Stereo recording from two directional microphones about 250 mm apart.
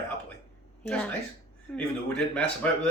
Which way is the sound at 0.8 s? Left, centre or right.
Centre.